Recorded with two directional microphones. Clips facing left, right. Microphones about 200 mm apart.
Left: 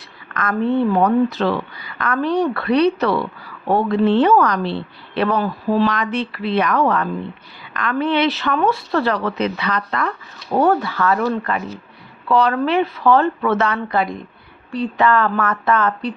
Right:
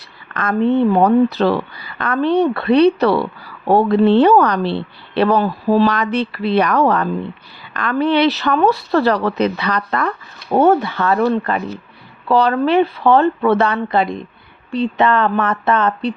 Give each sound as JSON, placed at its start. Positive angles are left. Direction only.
{"t": 0.3, "sound": "a woman's voice", "side_deg": -25}
{"t": 10.5, "sound": "a woman's voice", "side_deg": -25}